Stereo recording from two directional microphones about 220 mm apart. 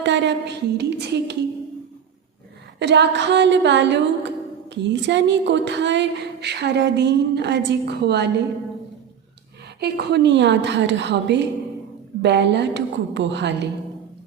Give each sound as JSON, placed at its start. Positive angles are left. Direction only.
{"t": 0.0, "sound": "speech", "side_deg": -55}
{"t": 2.7, "sound": "speech", "side_deg": -50}
{"t": 9.8, "sound": "speech", "side_deg": -50}